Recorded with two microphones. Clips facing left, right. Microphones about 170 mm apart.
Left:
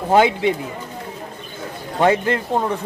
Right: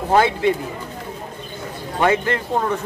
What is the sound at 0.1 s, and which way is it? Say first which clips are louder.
Speech: left 2 dB; 15° left (ahead or behind).